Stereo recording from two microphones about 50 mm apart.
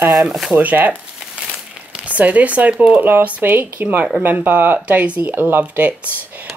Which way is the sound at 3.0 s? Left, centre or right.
Right.